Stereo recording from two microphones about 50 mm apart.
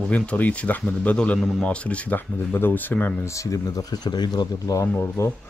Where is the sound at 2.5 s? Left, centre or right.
Left.